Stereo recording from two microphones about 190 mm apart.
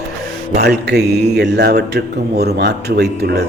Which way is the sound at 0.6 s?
60° right (ahead or behind).